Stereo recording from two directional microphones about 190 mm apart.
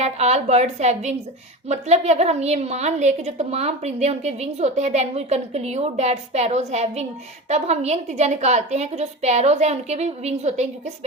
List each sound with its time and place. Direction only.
0.0 s a woman's voice: 35° right (ahead or behind)